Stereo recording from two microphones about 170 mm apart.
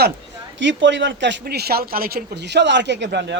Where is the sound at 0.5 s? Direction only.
90° right.